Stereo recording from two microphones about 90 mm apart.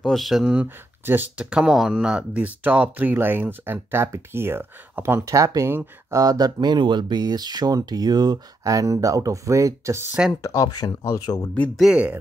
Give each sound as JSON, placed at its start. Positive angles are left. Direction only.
{"t": 0.0, "sound": "speech", "side_deg": 0}
{"t": 1.0, "sound": "speech", "side_deg": -25}
{"t": 1.4, "sound": "speech", "side_deg": -10}
{"t": 10.4, "sound": "speech", "side_deg": 40}
{"t": 11.7, "sound": "speech", "side_deg": 0}